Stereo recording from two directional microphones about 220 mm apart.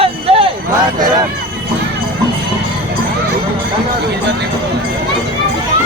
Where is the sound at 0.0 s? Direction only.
25° right (ahead or behind).